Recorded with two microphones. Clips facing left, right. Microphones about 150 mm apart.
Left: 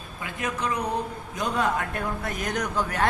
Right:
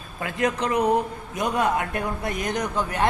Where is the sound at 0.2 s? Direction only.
70° right (ahead or behind).